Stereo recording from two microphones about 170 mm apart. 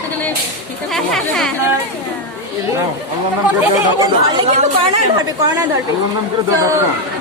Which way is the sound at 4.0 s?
30° right (ahead or behind).